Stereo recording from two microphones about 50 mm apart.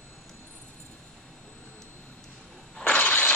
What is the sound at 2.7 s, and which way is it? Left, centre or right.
Mechanisms, left.